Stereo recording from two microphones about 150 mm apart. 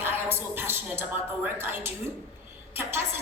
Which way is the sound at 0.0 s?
15° right (ahead or behind).